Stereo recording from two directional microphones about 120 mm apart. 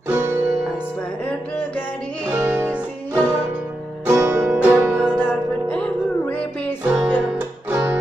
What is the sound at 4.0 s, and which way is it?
Music, 20° right (ahead or behind).